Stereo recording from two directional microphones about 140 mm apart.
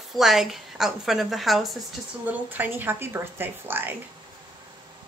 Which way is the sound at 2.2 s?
10° right (ahead or behind).